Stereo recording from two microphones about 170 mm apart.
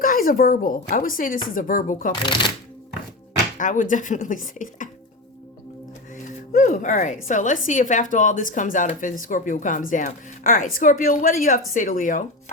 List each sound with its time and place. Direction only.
0.0 s speech: 55° left (ahead or behind)
3.6 s a woman's voice: 50° left (ahead or behind)
6.2 s a woman's voice: 50° left (ahead or behind)